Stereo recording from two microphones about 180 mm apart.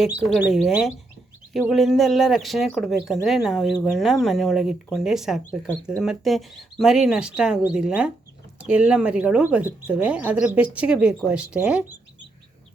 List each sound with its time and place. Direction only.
0.0 s speech: 5° right (ahead or behind)